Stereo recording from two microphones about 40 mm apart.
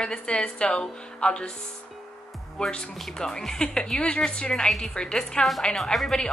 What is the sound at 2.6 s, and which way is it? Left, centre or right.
A woman's voice, left.